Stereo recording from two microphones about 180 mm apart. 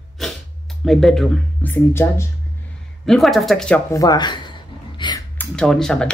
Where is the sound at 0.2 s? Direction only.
Centre (ahead or behind).